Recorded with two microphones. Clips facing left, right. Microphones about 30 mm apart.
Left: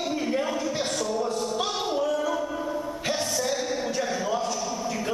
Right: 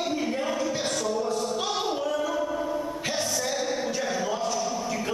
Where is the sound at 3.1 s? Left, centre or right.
Centre.